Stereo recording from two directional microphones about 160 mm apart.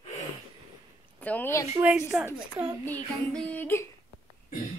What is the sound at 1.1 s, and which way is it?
Speech, 10° left (ahead or behind).